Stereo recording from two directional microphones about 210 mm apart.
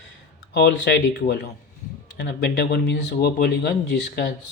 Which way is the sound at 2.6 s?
55° left (ahead or behind).